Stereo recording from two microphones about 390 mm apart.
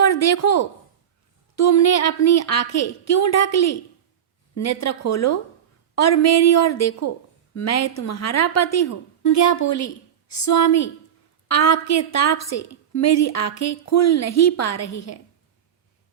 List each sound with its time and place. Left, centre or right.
0.0 s a woman's voice: left